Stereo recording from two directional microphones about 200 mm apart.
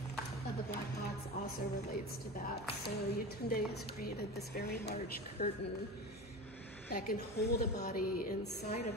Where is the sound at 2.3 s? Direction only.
45° left (ahead or behind).